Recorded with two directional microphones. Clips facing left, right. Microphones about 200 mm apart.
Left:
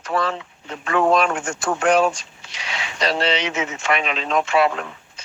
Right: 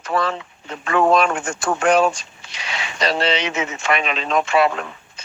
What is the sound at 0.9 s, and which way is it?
Speech, 75° right (ahead or behind).